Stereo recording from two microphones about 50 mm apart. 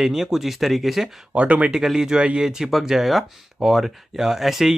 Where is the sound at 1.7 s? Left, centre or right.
Centre.